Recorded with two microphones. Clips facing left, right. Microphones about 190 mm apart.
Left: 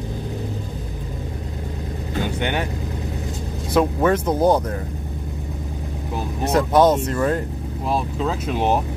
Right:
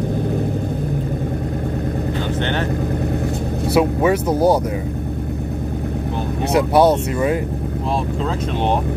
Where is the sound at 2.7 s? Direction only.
55° right (ahead or behind).